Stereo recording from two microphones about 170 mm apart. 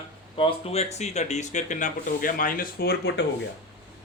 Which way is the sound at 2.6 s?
65° left (ahead or behind).